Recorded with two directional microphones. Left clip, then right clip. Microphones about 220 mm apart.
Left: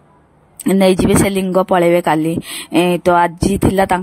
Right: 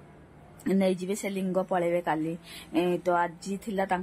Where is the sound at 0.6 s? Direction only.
40° left (ahead or behind).